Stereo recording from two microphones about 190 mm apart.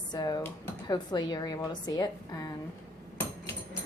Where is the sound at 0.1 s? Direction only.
20° left (ahead or behind).